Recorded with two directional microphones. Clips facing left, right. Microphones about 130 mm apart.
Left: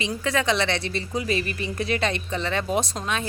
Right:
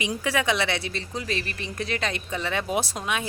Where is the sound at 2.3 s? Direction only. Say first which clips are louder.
Left 2 dB; 10° right (ahead or behind).